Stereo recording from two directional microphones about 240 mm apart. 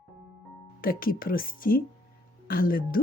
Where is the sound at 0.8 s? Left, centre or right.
Left.